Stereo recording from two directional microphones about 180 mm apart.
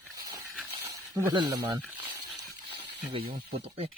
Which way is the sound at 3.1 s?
35° right (ahead or behind).